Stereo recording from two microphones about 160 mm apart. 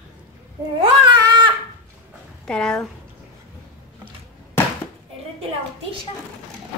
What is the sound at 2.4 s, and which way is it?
Speech, 5° left (ahead or behind).